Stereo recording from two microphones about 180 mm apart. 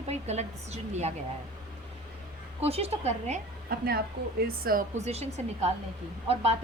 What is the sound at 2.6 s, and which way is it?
A woman's voice, 35° right (ahead or behind).